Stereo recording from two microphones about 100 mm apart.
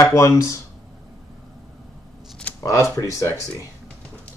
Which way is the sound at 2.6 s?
30° left (ahead or behind).